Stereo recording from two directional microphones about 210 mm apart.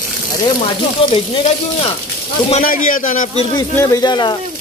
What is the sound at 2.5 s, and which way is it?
Speech, 40° left (ahead or behind).